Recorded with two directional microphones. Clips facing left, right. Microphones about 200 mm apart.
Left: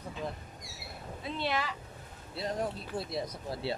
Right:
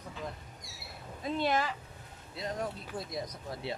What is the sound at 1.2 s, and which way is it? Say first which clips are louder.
Speech: right 3 dB; 45° right (ahead or behind).